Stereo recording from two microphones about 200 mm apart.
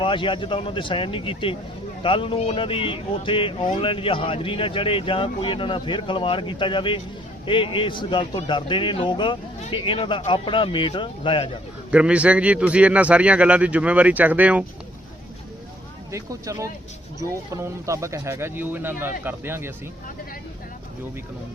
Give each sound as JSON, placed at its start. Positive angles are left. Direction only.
{"t": 0.0, "sound": "a man's voice", "side_deg": 25}
{"t": 11.9, "sound": "a man's voice", "side_deg": -5}
{"t": 16.1, "sound": "a man's voice", "side_deg": -15}